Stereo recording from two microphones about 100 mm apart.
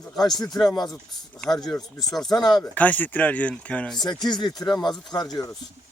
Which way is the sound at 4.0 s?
45° left (ahead or behind).